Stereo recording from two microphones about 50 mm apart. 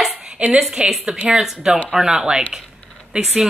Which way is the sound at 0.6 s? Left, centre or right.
Centre.